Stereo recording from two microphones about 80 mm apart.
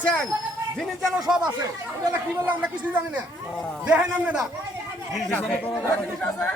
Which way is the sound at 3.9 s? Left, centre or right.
Centre.